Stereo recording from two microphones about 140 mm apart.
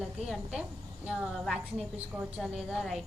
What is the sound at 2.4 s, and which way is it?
Speech, centre (ahead or behind).